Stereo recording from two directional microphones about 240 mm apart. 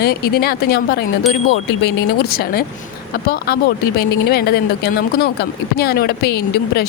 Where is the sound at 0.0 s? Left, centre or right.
Left.